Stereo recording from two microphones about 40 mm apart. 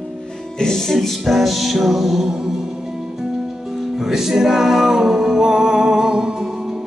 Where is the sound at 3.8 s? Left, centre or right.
Centre.